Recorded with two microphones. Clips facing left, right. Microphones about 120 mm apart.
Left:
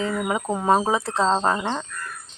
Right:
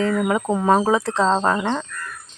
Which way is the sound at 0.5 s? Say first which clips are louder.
Right 2 dB; 20° left (ahead or behind).